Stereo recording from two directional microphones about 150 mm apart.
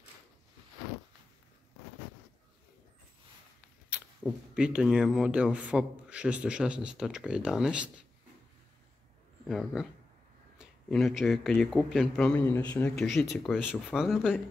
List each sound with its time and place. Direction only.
4.2 s speech: 5° left (ahead or behind)
4.6 s a man's voice: 5° right (ahead or behind)
9.5 s a man's voice: centre (ahead or behind)
10.9 s a man's voice: centre (ahead or behind)